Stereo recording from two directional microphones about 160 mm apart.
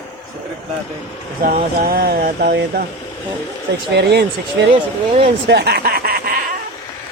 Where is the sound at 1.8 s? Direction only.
75° right (ahead or behind).